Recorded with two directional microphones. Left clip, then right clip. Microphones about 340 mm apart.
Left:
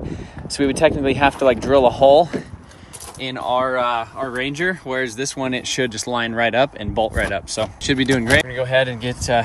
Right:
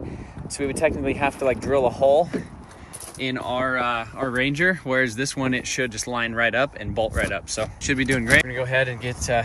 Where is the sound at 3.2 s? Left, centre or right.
Centre.